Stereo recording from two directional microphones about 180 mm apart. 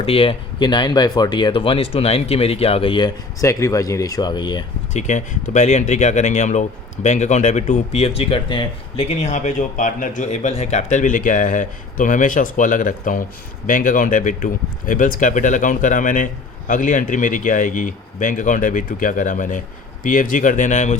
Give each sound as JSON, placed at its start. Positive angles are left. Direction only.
{"t": 0.0, "sound": "speech", "side_deg": 30}
{"t": 4.9, "sound": "speech", "side_deg": 40}